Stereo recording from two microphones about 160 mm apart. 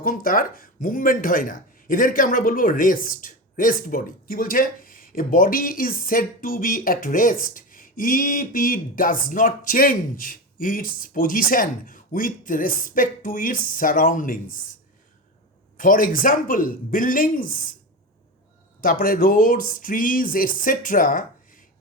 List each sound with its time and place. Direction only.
0.0 s speech: 60° left (ahead or behind)
15.8 s speech: 55° left (ahead or behind)
18.8 s speech: 65° left (ahead or behind)